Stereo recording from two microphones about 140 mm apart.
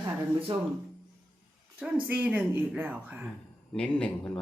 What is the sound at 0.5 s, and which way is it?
Speech, 40° right (ahead or behind).